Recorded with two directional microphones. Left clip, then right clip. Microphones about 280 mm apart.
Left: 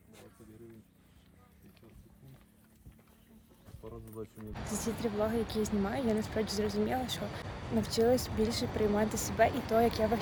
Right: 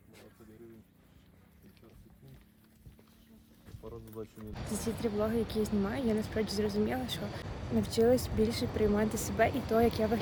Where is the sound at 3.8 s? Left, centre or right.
Centre.